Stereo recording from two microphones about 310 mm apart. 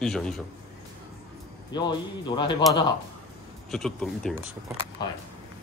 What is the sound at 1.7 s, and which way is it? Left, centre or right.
Speech, centre.